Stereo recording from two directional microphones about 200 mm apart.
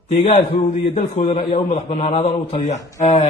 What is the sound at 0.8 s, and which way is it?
A man's voice, 30° left (ahead or behind).